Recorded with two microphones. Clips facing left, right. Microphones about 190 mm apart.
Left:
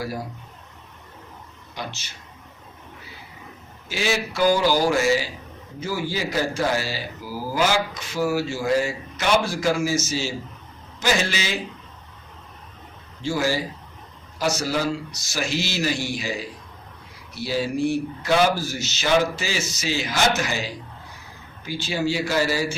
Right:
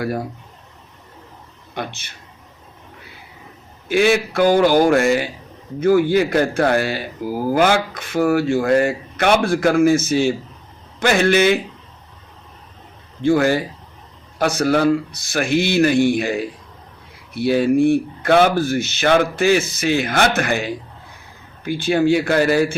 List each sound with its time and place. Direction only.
1.7 s speech: 55° right (ahead or behind)
3.8 s speech: 55° right (ahead or behind)
13.2 s speech: 60° right (ahead or behind)